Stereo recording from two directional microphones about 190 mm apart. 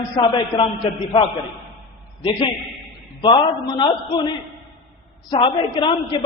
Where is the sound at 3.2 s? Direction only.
25° left (ahead or behind).